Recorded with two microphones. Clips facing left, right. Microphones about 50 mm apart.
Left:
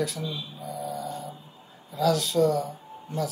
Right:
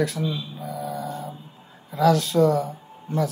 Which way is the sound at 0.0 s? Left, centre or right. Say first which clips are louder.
Right 5 dB; right.